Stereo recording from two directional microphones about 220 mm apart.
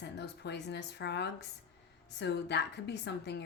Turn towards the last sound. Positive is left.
turn(degrees=50)  # may be behind; listen again after turning